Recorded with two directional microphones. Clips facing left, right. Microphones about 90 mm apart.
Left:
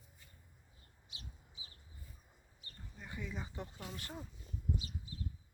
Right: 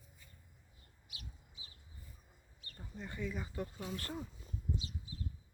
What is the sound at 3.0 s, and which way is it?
Speech, 10° left (ahead or behind).